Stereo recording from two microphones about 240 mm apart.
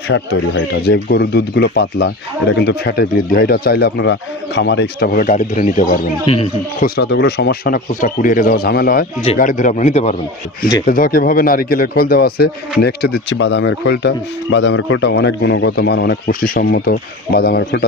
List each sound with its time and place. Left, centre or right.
0.1 s speech: left
7.0 s speech: left